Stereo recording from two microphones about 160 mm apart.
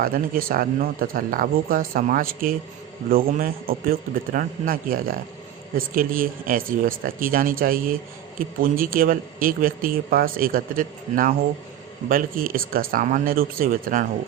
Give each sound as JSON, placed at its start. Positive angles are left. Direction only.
{"t": 0.0, "sound": "a man's voice", "side_deg": -65}